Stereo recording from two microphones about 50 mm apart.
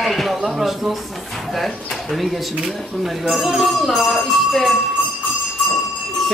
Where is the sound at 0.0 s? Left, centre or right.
Centre.